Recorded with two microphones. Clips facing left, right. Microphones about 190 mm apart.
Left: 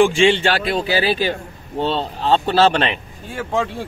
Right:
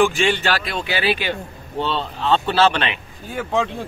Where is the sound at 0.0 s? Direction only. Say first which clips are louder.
Left 4 dB; 30° left (ahead or behind).